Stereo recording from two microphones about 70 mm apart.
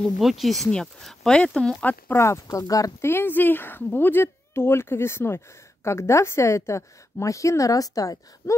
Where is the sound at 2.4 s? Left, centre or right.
Left.